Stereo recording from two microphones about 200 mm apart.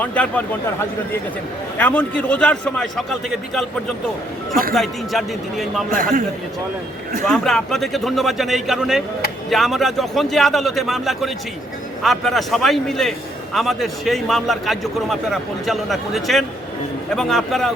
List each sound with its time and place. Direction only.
0.0 s a man's voice: 5° left (ahead or behind)
4.7 s a man's voice: centre (ahead or behind)
5.9 s a man's voice: 45° right (ahead or behind)
7.3 s a man's voice: 5° left (ahead or behind)